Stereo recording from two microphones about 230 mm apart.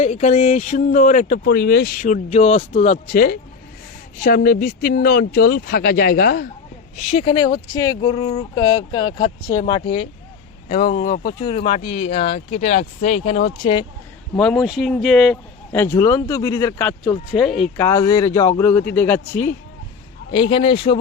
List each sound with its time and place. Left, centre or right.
0.0 s speech: left
6.9 s speech: left
14.3 s speech: centre
20.3 s speech: left